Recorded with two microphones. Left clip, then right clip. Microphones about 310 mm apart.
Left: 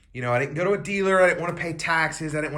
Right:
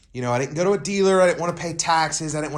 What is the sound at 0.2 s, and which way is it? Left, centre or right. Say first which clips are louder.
A man's voice: right 1 dB; centre.